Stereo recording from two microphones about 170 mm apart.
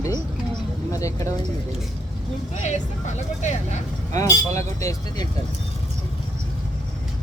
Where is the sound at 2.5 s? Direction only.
45° left (ahead or behind).